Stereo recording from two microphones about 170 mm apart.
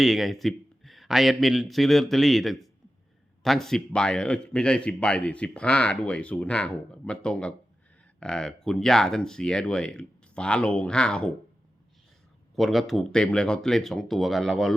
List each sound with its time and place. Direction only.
0.0 s a man's voice: centre (ahead or behind)
12.5 s a man's voice: centre (ahead or behind)